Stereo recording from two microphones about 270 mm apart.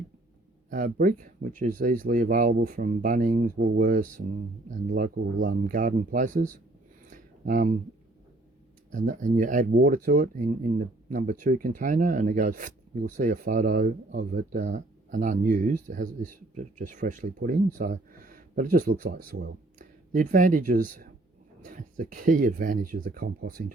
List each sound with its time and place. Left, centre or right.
0.7 s speech: right
7.1 s a sound: right
8.9 s speech: right